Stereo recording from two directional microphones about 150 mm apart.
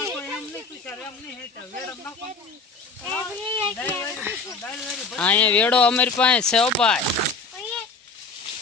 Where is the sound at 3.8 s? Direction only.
15° left (ahead or behind).